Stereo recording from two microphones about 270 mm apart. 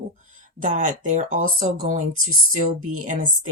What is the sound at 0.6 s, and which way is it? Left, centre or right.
Speech, right.